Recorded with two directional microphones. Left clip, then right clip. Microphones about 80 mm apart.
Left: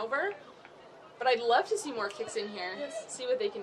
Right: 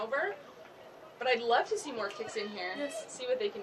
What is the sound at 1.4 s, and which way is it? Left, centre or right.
A woman's voice, left.